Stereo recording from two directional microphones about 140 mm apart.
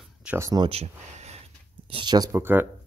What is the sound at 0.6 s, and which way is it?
Speech, 45° right (ahead or behind).